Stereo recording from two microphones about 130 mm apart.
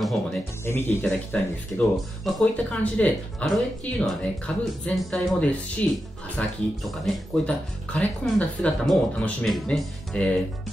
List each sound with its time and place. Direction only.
0.0 s speech: centre (ahead or behind)
0.7 s speech: 15° left (ahead or behind)
1.8 s speech: centre (ahead or behind)